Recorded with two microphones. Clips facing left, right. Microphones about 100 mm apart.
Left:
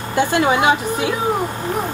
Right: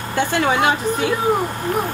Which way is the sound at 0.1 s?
15° left (ahead or behind).